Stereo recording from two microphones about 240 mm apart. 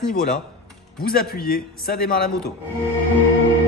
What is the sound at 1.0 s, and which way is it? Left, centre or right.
A man's voice, left.